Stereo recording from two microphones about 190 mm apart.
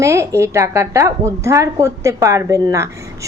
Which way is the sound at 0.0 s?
15° right (ahead or behind).